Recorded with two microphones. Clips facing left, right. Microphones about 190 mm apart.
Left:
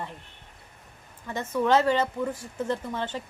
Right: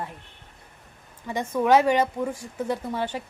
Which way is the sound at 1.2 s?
10° right (ahead or behind).